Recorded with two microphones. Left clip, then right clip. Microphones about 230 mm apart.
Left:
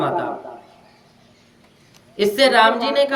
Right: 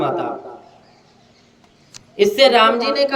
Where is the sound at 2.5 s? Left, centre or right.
Left.